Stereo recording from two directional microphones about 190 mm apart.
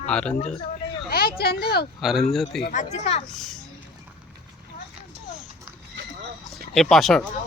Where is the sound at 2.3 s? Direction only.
Centre (ahead or behind).